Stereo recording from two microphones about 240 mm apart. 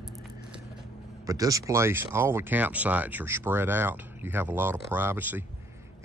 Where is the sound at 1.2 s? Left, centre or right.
Centre.